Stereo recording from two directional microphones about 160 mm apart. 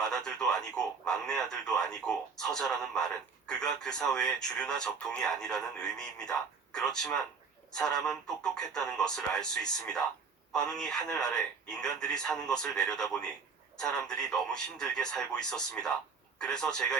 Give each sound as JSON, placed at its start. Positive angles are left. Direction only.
{"t": 0.0, "sound": "speech", "side_deg": 5}